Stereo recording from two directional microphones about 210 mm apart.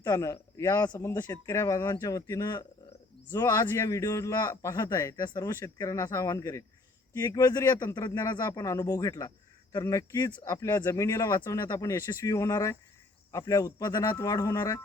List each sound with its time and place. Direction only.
0.0 s a man's voice: 15° left (ahead or behind)